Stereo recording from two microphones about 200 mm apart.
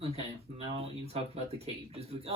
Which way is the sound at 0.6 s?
30° right (ahead or behind).